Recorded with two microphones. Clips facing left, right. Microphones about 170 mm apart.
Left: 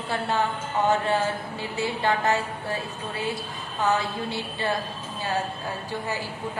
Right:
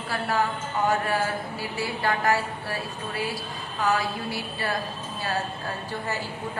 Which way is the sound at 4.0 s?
25° left (ahead or behind).